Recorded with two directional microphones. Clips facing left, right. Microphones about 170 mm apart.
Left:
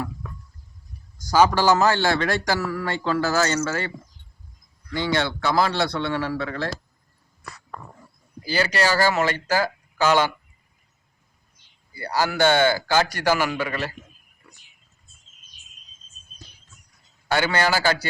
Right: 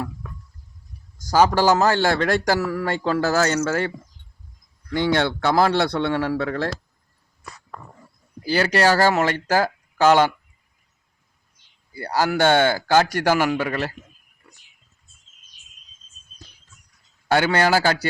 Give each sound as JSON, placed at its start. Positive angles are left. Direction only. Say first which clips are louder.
{"t": 1.3, "sound": "a man's voice", "louder": "right 1 dB", "side_deg": -45}
{"t": 4.9, "sound": "a man's voice", "louder": "right 4 dB", "side_deg": -55}
{"t": 8.4, "sound": "a man's voice", "louder": "right 4 dB", "side_deg": -60}
{"t": 11.9, "sound": "a man's voice", "louder": "right 2 dB", "side_deg": -55}
{"t": 17.2, "sound": "a man's voice", "louder": "right 3 dB", "side_deg": -55}